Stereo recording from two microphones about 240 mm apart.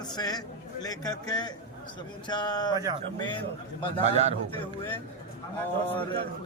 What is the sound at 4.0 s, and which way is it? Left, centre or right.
Speech, right.